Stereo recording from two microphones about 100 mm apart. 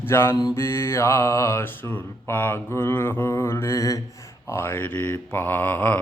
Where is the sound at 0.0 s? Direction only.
25° left (ahead or behind).